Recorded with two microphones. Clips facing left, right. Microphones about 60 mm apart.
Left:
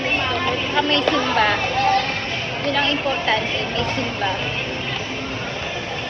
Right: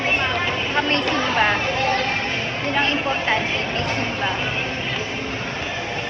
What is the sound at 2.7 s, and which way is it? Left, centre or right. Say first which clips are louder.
Speech: even; right.